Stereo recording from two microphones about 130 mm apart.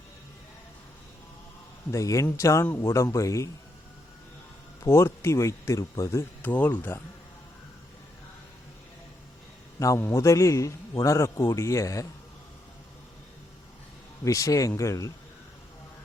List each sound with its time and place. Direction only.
1.9 s speech: 25° left (ahead or behind)
4.8 s speech: 20° left (ahead or behind)
9.8 s speech: 25° left (ahead or behind)
14.3 s speech: 25° left (ahead or behind)